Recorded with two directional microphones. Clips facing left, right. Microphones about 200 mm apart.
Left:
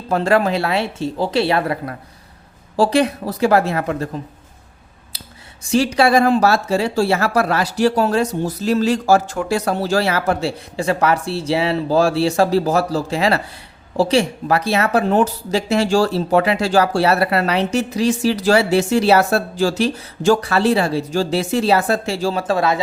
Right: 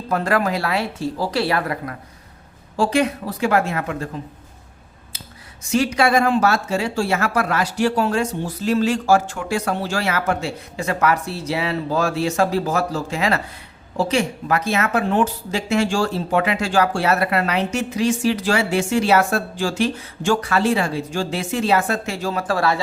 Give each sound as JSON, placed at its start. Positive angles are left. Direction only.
{"t": 0.1, "sound": "speech", "side_deg": 25}
{"t": 5.1, "sound": "a sound", "side_deg": 35}
{"t": 5.6, "sound": "speech", "side_deg": 30}